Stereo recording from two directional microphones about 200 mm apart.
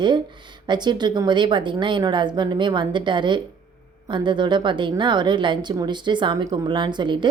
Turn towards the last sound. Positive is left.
turn(degrees=-25)  # may be behind; listen again after turning